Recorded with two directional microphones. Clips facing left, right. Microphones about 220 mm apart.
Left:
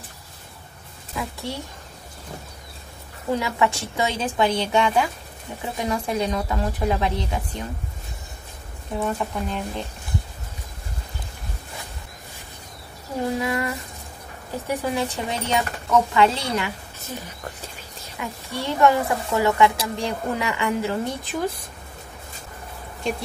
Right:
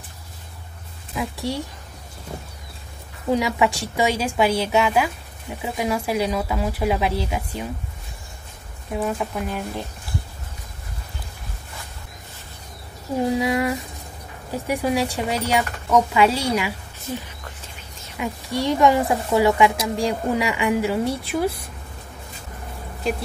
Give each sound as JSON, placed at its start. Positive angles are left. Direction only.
{"t": 1.1, "sound": "speech", "side_deg": -15}
{"t": 3.3, "sound": "speech", "side_deg": -15}
{"t": 8.9, "sound": "speech", "side_deg": -5}
{"t": 13.2, "sound": "speech", "side_deg": -15}
{"t": 18.2, "sound": "speech", "side_deg": -15}